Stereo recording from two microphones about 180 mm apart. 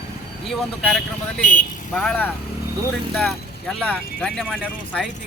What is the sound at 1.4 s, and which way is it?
Speech, 45° left (ahead or behind).